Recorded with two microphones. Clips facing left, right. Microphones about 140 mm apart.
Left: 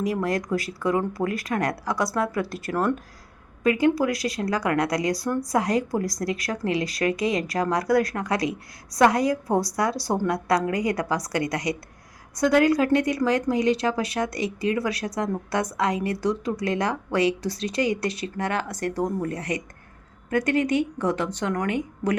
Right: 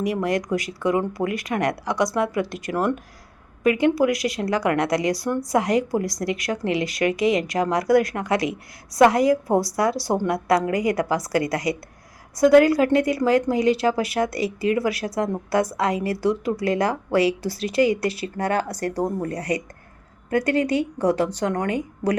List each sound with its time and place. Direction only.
0.0 s speech: 20° right (ahead or behind)
3.6 s speech: 20° right (ahead or behind)
9.5 s speech: centre (ahead or behind)
10.2 s a woman's voice: 25° right (ahead or behind)